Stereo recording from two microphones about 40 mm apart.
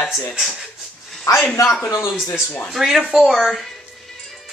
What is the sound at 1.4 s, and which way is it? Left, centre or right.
Speech, left.